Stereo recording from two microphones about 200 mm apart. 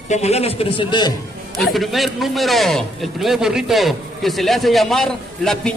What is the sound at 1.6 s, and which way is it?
A man's voice, centre (ahead or behind).